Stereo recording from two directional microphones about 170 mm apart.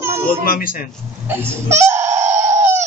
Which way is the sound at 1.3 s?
15° right (ahead or behind).